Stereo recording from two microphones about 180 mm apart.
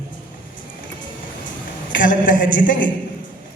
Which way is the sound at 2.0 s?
50° left (ahead or behind).